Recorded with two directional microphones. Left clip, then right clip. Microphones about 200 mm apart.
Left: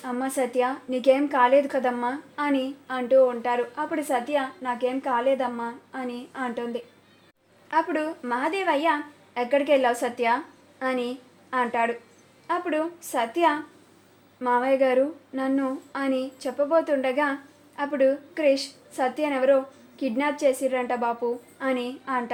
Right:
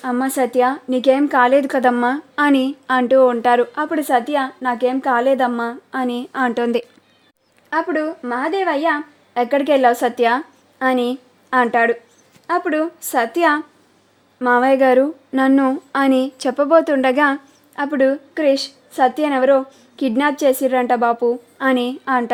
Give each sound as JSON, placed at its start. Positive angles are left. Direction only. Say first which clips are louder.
{"t": 0.0, "sound": "a woman's voice", "louder": "right 8 dB", "side_deg": -45}
{"t": 7.7, "sound": "a woman's voice", "louder": "right 5 dB", "side_deg": -40}